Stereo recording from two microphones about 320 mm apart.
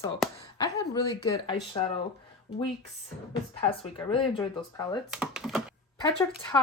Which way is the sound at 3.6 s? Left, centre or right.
Centre.